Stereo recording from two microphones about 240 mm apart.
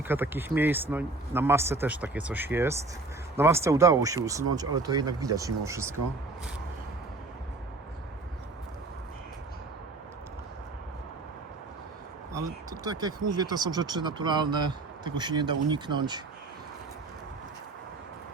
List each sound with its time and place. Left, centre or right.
0.0 s speech: centre
12.8 s speech: centre